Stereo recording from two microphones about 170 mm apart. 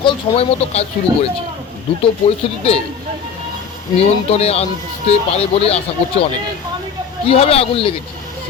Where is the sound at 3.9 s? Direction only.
35° left (ahead or behind).